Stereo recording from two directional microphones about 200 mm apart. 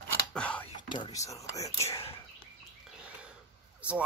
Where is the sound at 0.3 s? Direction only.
5° left (ahead or behind).